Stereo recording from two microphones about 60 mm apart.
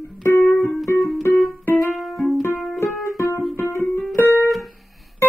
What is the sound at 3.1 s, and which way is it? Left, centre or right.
Music, left.